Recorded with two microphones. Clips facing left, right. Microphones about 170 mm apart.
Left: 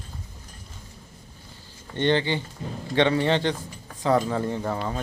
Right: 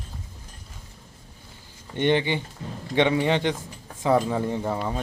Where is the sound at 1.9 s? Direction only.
15° right (ahead or behind).